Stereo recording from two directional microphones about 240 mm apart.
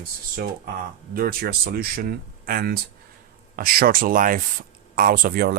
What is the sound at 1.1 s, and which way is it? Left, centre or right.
Speech, right.